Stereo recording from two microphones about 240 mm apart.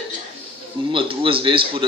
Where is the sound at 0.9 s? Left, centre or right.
Right.